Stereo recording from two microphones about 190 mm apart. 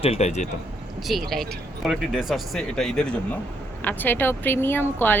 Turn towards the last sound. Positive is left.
turn(degrees=10)  # may be behind; listen again after turning